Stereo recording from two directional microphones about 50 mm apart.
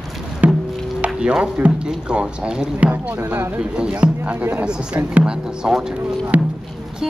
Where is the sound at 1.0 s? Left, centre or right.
Right.